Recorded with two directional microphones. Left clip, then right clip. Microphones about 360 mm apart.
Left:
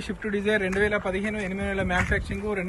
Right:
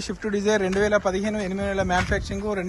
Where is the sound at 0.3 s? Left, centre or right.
Centre.